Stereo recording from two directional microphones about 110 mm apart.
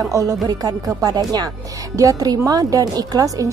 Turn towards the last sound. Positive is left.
turn(degrees=-30)  # may be behind; listen again after turning